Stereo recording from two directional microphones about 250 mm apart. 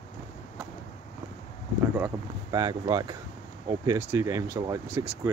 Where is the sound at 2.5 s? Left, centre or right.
Centre.